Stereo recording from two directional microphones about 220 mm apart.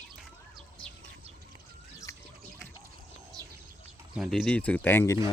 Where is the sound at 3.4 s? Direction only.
15° right (ahead or behind).